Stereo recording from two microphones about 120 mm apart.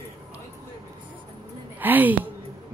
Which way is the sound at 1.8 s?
15° right (ahead or behind).